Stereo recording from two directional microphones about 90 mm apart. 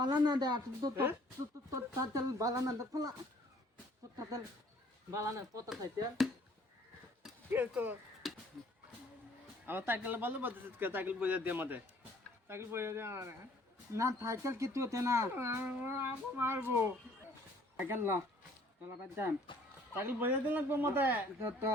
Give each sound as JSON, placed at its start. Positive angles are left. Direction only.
{"t": 0.0, "sound": "speech", "side_deg": -50}
{"t": 1.7, "sound": "speech", "side_deg": -40}
{"t": 4.2, "sound": "speech", "side_deg": -40}
{"t": 7.5, "sound": "a man's voice", "side_deg": -25}
{"t": 8.2, "sound": "a sound", "side_deg": 0}
{"t": 9.6, "sound": "a man's voice", "side_deg": -25}
{"t": 19.5, "sound": "speech", "side_deg": 70}
{"t": 20.0, "sound": "a man's voice", "side_deg": -20}